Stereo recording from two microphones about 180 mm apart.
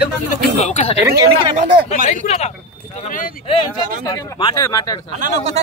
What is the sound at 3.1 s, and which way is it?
Speech, 50° left (ahead or behind).